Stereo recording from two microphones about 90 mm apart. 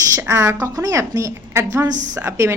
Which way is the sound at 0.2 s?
35° right (ahead or behind).